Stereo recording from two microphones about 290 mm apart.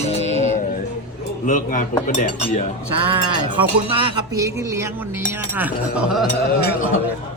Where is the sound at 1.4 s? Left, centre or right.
Left.